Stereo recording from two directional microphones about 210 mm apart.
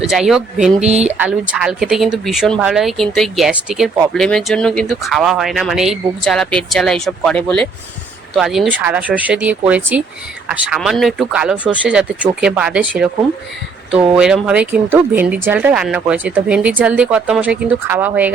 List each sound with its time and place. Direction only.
0.0 s speech: centre (ahead or behind)
0.8 s speech: 30° right (ahead or behind)
1.2 s speech: 5° right (ahead or behind)
14.2 s speech: 5° right (ahead or behind)